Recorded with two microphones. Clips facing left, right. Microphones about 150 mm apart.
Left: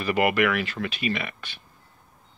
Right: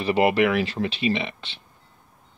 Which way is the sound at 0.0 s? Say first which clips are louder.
Right 3 dB; 30° right (ahead or behind).